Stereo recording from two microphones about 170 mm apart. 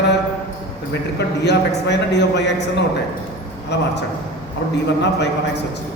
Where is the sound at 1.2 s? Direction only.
90° left.